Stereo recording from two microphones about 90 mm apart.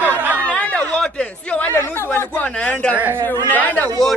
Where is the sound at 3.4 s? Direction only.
20° left (ahead or behind).